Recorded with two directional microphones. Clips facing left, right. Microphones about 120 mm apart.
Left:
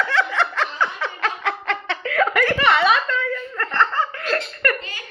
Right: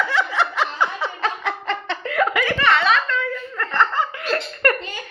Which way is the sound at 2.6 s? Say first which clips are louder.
Even; 10° left (ahead or behind).